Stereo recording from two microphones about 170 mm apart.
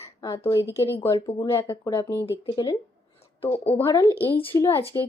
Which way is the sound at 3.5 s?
35° left (ahead or behind).